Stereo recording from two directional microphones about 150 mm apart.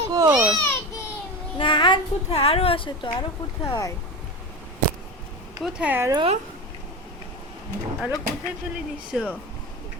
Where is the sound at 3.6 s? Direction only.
20° left (ahead or behind).